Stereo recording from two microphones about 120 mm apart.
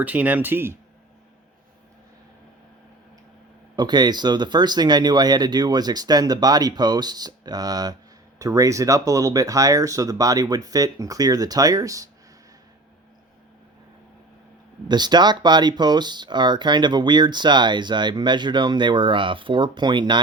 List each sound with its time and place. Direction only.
0.0 s speech: 15° right (ahead or behind)
3.8 s speech: 35° right (ahead or behind)
14.8 s speech: 35° right (ahead or behind)